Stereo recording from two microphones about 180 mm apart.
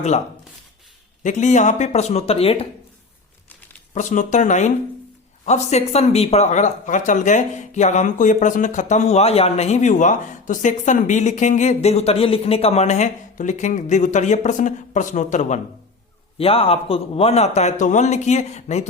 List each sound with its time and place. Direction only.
1.2 s speech: 40° left (ahead or behind)
3.9 s speech: 45° left (ahead or behind)